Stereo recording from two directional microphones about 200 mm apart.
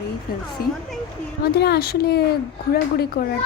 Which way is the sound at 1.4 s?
50° left (ahead or behind).